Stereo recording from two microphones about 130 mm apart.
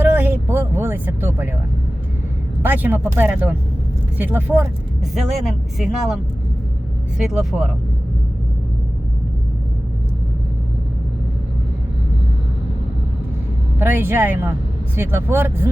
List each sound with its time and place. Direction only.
0.0 s vehicle: 15° right (ahead or behind)
2.6 s speech: 15° right (ahead or behind)
5.1 s speech: centre (ahead or behind)
7.2 s speech: 5° right (ahead or behind)
13.7 s speech: 15° right (ahead or behind)